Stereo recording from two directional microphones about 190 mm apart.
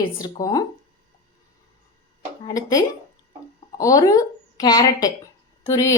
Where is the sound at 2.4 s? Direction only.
20° left (ahead or behind).